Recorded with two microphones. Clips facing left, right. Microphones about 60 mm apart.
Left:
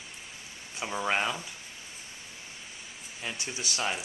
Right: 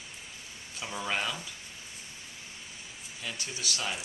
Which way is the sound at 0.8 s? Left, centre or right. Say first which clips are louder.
Left 4 dB; left.